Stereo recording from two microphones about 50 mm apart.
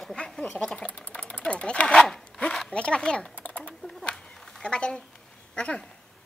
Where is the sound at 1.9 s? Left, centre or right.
Centre.